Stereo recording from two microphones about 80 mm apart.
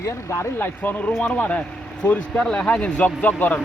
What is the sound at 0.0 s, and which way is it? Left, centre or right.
Speech, left.